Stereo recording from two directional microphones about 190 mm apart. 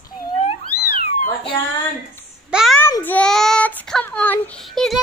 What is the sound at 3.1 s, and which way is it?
Child singing, 5° left (ahead or behind).